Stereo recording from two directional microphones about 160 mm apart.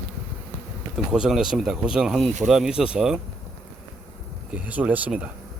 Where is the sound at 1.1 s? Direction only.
5° right (ahead or behind).